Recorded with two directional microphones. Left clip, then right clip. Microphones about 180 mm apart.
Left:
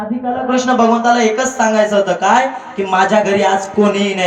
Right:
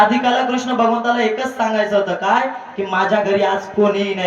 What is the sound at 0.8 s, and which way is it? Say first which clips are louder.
A man's voice: left 2 dB; 35° left (ahead or behind).